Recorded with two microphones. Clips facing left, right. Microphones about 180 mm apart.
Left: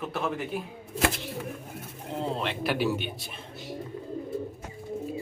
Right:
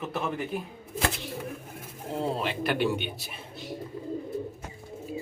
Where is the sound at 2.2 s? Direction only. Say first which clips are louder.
Right 1 dB; 5° right (ahead or behind).